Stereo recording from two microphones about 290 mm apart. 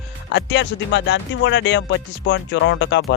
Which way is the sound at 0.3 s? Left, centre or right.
Left.